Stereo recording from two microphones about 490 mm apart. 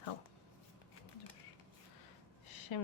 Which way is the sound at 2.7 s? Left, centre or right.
Left.